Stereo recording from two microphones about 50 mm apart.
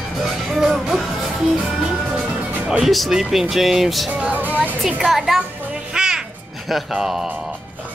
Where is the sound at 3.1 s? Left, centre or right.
Centre.